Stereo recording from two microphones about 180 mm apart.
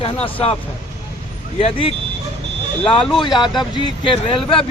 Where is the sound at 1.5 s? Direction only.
30° left (ahead or behind).